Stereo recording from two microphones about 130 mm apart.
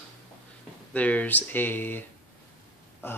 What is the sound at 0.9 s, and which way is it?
Speech, 10° left (ahead or behind).